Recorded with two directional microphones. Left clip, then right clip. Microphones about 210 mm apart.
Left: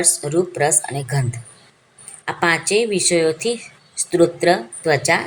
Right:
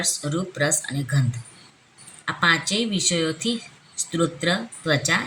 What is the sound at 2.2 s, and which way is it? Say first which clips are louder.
A woman's voice: left 2 dB; 30° left (ahead or behind).